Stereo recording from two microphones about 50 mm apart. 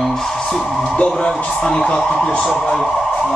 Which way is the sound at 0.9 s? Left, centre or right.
Centre.